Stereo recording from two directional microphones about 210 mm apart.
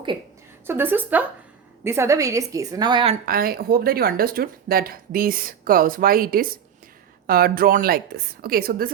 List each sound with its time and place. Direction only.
0.7 s a woman's voice: 10° right (ahead or behind)
3.2 s speech: 45° right (ahead or behind)